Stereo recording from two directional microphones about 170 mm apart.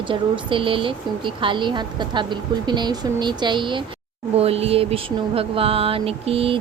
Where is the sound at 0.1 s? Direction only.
30° right (ahead or behind).